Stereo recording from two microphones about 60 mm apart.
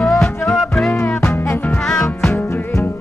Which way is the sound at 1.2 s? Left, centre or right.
Left.